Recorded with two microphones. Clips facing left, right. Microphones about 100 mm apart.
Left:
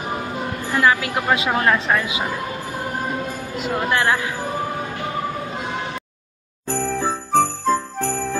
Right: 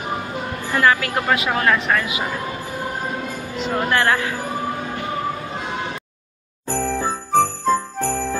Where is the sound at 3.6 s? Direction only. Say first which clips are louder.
Right 1 dB; 10° left (ahead or behind).